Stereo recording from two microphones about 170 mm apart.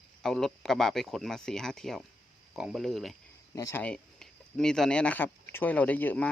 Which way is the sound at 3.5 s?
20° left (ahead or behind).